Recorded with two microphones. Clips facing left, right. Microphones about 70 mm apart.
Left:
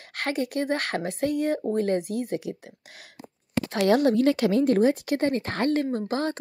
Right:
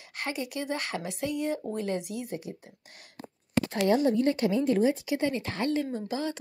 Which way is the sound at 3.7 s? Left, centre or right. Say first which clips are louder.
Left 5 dB; left.